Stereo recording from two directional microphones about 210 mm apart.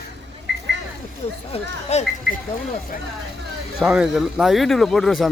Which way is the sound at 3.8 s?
5° right (ahead or behind).